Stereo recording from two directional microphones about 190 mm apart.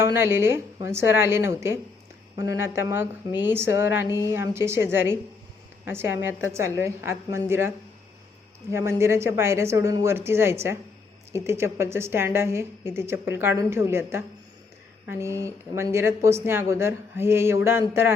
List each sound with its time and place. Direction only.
0.0 s a woman's voice: 10° right (ahead or behind)
8.7 s a woman's voice: 15° right (ahead or behind)